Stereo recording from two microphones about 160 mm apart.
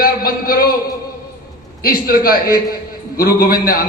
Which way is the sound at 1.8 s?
65° left (ahead or behind).